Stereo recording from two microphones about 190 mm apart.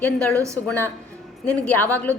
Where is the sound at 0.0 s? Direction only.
5° left (ahead or behind).